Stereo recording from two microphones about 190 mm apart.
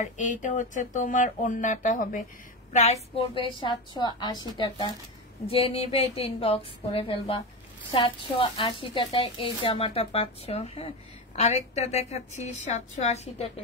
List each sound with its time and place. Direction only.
0.0 s a woman's voice: 40° left (ahead or behind)